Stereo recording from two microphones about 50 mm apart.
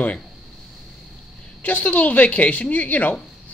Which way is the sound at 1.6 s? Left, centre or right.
Left.